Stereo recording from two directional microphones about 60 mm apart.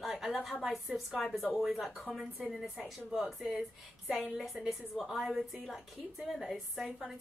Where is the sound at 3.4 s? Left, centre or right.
Centre.